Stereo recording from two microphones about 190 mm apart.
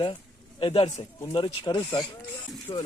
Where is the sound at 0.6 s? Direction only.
30° left (ahead or behind).